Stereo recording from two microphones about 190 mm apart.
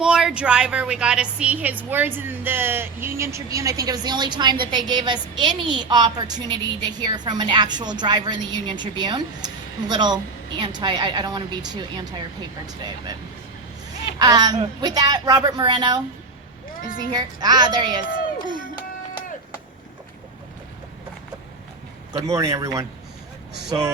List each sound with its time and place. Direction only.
0.0 s a woman's voice: 5° right (ahead or behind); by 13.1 s 20° right (ahead or behind)
14.2 s a woman's voice: 20° right (ahead or behind)
17.0 s a woman's voice: 20° right (ahead or behind)
22.1 s a man's voice: 20° right (ahead or behind)